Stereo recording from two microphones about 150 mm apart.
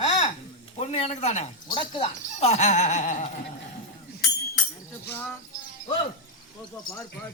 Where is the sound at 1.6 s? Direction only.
35° left (ahead or behind); by 3.3 s 55° left (ahead or behind).